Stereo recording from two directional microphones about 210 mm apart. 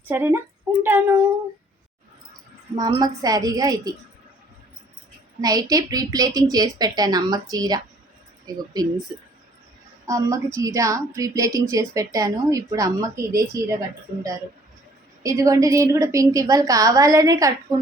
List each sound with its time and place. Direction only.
0.0 s speech: 10° right (ahead or behind)
2.7 s a woman's voice: 20° right (ahead or behind)
5.4 s a woman's voice: 15° right (ahead or behind)
10.1 s a woman's voice: 15° right (ahead or behind)
15.2 s a woman's voice: 15° right (ahead or behind)